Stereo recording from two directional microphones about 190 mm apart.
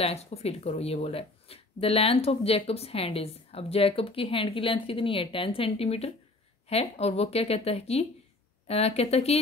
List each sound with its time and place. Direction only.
0.0 s speech: 35° left (ahead or behind)